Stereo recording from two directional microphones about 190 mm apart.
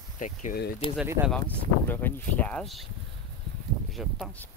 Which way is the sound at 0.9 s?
10° right (ahead or behind).